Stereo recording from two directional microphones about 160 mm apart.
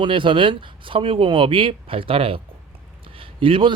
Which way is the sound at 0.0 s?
30° right (ahead or behind).